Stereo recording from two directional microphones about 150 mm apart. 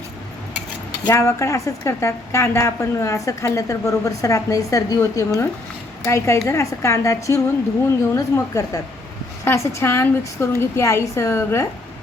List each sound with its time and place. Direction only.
1.0 s a woman's voice: 20° left (ahead or behind)